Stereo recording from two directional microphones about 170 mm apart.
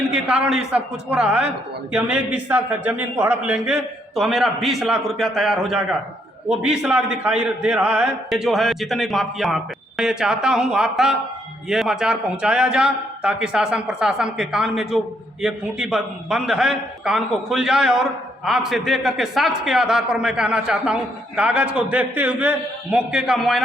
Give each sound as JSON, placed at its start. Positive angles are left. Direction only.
{"t": 0.1, "sound": "a man's voice", "side_deg": -5}